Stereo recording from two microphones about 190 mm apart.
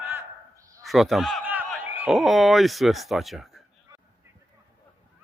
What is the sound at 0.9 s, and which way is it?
A man's voice, centre (ahead or behind).